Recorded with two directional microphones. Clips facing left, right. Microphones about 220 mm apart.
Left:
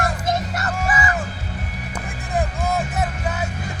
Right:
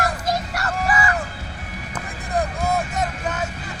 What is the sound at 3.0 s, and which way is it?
Vehicle, 10° left (ahead or behind).